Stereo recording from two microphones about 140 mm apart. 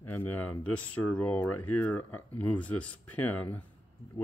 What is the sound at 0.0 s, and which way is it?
Speech, 15° left (ahead or behind).